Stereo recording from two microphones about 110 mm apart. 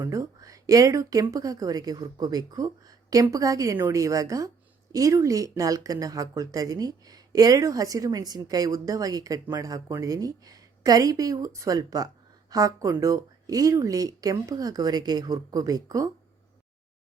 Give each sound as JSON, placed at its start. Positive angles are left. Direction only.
{"t": 0.0, "sound": "speech", "side_deg": -30}